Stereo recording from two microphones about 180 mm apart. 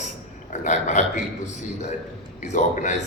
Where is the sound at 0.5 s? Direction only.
40° left (ahead or behind).